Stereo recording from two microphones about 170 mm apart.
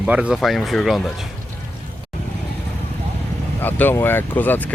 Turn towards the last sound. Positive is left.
turn(degrees=10)  # may be behind; listen again after turning